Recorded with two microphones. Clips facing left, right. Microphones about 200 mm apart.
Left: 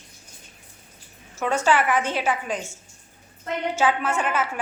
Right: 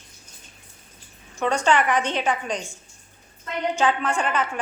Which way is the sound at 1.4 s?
5° left (ahead or behind).